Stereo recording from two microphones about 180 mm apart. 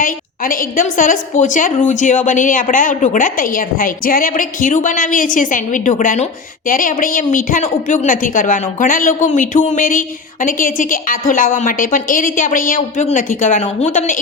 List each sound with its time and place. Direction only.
0.0 s a woman's voice: 50° left (ahead or behind)